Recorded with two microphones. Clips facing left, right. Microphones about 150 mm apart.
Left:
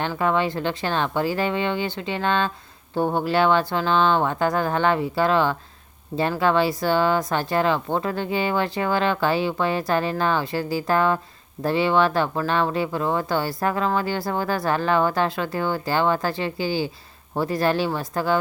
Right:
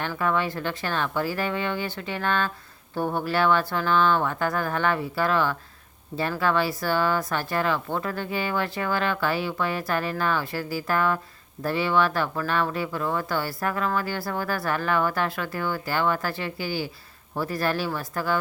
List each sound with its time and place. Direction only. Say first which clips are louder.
0.0 s speech: left 4 dB; 25° left (ahead or behind)